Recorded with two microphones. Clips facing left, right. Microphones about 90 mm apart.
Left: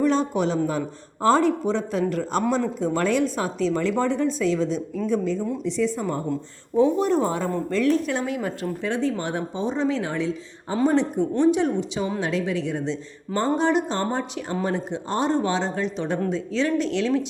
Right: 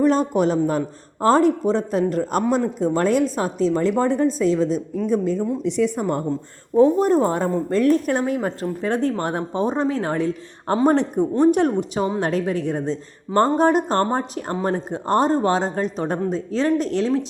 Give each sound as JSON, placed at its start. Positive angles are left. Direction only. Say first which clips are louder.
{"t": 0.0, "sound": "speech", "louder": "right 4 dB", "side_deg": -45}
{"t": 5.6, "sound": "speech", "louder": "right 3 dB", "side_deg": -60}
{"t": 6.7, "sound": "speech", "louder": "right 4 dB", "side_deg": -40}
{"t": 8.8, "sound": "speech", "louder": "right 4 dB", "side_deg": -50}